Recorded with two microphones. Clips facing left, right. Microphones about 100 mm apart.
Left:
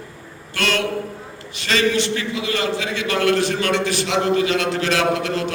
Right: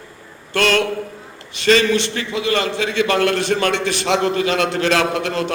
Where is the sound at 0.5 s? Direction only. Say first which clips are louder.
Right 5 dB; 55° right (ahead or behind).